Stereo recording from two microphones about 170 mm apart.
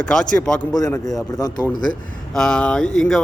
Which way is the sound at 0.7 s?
20° left (ahead or behind).